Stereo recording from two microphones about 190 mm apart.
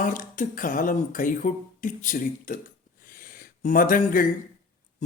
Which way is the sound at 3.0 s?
50° left (ahead or behind).